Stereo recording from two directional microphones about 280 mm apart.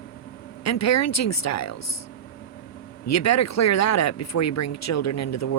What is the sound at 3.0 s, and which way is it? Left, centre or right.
Speech, left.